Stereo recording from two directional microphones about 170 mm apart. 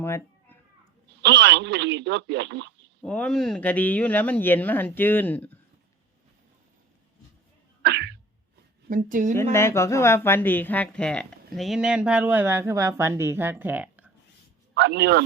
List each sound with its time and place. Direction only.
0.0 s cat: 15° left (ahead or behind)
1.2 s speech: 90° right
3.0 s speech: 5° left (ahead or behind)
7.8 s sneeze: 75° right (ahead or behind)
8.9 s a woman's voice: 55° right (ahead or behind)
9.3 s speech: 15° left (ahead or behind); by 14.1 s 10° right (ahead or behind)
14.8 s a man's voice: 75° right (ahead or behind)